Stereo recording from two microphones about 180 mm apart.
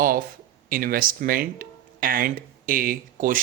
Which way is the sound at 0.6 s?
50° right (ahead or behind).